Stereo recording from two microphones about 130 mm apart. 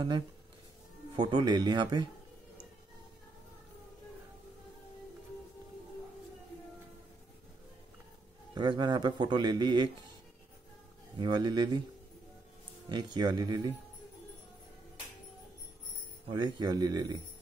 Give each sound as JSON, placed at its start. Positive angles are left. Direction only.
{"t": 1.1, "sound": "speech", "side_deg": -35}
{"t": 8.5, "sound": "speech", "side_deg": -35}
{"t": 11.1, "sound": "speech", "side_deg": -35}
{"t": 12.9, "sound": "speech", "side_deg": -35}
{"t": 16.3, "sound": "speech", "side_deg": -35}